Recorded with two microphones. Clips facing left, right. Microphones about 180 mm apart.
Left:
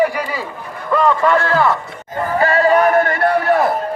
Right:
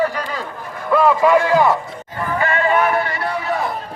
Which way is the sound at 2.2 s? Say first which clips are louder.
Left 5 dB; 35° left (ahead or behind).